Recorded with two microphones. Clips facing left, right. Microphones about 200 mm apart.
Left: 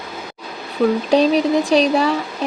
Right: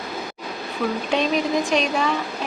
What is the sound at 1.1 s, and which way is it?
Speech, 35° left (ahead or behind).